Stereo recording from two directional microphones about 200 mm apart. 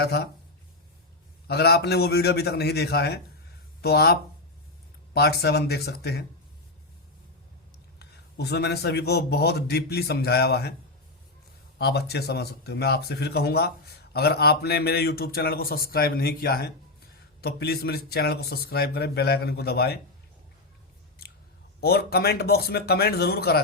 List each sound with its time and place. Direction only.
0.0 s speech: 55° left (ahead or behind)
1.5 s speech: 55° left (ahead or behind)
7.9 s speech: 55° left (ahead or behind)
11.8 s speech: 55° left (ahead or behind)
21.8 s speech: 50° left (ahead or behind)